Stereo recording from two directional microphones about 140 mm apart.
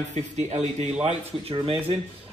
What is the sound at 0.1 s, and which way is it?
Speech, 55° right (ahead or behind).